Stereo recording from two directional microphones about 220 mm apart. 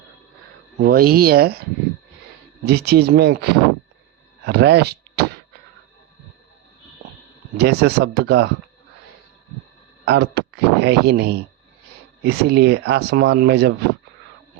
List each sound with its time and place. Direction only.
0.8 s speech: 40° right (ahead or behind)
2.6 s speech: 45° right (ahead or behind)
7.5 s speech: 45° right (ahead or behind)
10.1 s speech: 50° right (ahead or behind)